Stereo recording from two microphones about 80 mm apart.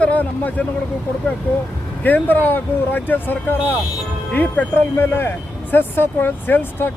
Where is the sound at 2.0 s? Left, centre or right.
Left.